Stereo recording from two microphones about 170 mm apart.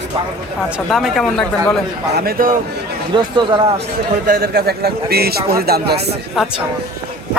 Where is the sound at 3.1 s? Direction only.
30° right (ahead or behind).